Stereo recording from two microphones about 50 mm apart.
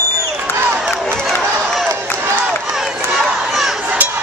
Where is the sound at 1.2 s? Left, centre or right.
Centre.